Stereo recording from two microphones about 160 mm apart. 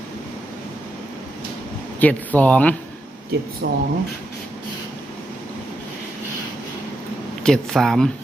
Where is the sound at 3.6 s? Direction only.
90° right.